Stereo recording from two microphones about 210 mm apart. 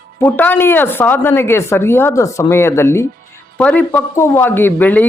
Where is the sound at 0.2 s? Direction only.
10° left (ahead or behind).